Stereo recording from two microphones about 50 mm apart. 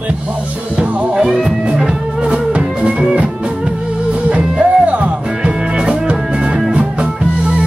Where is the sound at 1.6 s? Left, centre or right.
Centre.